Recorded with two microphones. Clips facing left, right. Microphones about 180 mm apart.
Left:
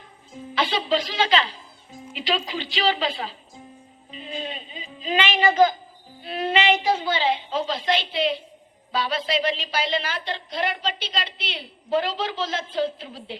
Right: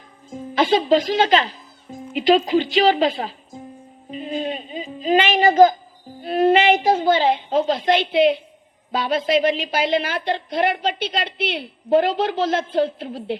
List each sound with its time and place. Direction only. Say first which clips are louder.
0.3 s a woman's voice: right 8 dB; 50° right (ahead or behind)